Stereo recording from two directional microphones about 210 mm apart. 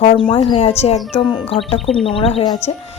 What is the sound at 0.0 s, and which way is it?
A woman's voice, 25° left (ahead or behind).